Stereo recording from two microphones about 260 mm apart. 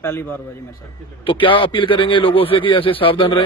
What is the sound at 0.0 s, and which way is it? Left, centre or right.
A man's voice, centre.